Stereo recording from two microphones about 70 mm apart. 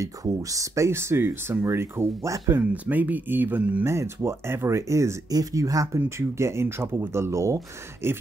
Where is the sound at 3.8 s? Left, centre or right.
Right.